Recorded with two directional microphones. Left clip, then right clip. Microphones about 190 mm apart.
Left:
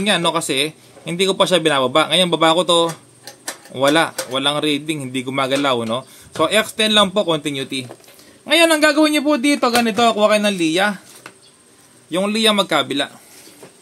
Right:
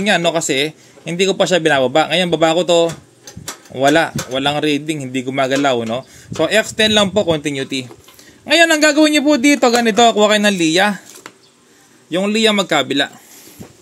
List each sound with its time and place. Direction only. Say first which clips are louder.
0.0 s a man's voice: right 2 dB; 10° right (ahead or behind)